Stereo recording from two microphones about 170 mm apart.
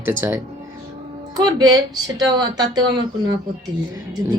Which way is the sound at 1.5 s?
25° right (ahead or behind).